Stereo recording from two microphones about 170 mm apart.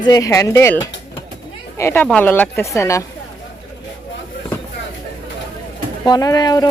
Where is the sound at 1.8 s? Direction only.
15° left (ahead or behind).